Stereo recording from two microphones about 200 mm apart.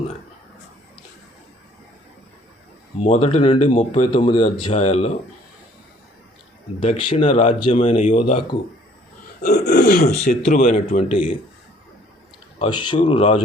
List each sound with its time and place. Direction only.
3.0 s speech: 30° left (ahead or behind)
6.7 s speech: 25° left (ahead or behind)
9.4 s speech: 45° left (ahead or behind)
10.9 s speech: 25° left (ahead or behind)
12.5 s speech: 25° left (ahead or behind)